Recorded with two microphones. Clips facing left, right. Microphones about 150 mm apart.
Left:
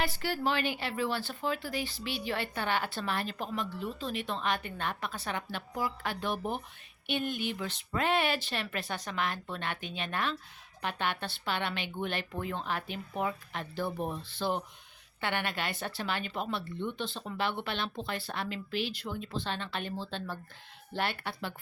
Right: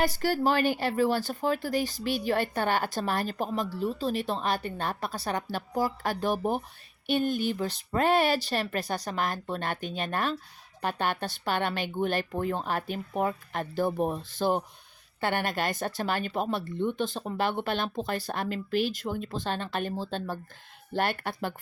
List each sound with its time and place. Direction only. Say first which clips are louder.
0.0 s speech: right 6 dB; 40° right (ahead or behind)